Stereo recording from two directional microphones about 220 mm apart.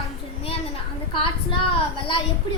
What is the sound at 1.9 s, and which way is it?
Speech, 25° left (ahead or behind).